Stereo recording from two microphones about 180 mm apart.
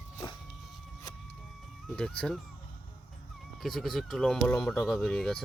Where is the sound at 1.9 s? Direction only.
5° left (ahead or behind).